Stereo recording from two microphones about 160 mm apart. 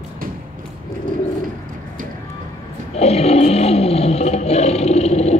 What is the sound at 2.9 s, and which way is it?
Roar, 40° left (ahead or behind).